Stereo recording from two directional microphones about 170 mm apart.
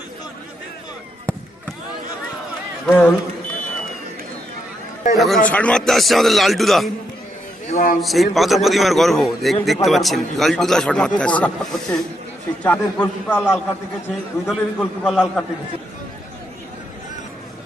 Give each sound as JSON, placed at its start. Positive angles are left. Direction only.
{"t": 2.8, "sound": "a man's voice", "side_deg": 15}
{"t": 5.1, "sound": "a man's voice", "side_deg": 0}
{"t": 7.7, "sound": "speech", "side_deg": 50}
{"t": 8.0, "sound": "a man's voice", "side_deg": 0}
{"t": 14.1, "sound": "a man's voice", "side_deg": 0}